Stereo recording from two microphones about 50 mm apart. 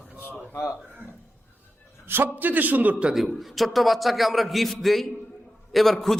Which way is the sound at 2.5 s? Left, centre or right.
Right.